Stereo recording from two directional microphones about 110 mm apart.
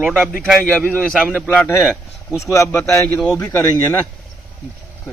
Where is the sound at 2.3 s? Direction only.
25° left (ahead or behind).